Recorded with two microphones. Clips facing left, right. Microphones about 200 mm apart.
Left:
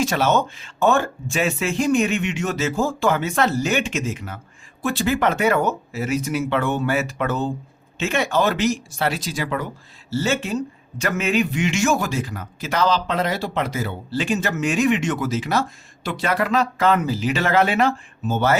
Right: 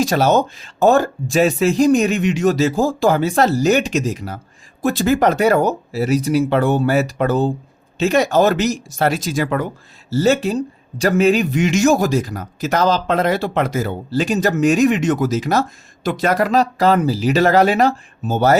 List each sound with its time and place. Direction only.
0.0 s a man's voice: 35° right (ahead or behind)
10.1 s a man's voice: 40° right (ahead or behind)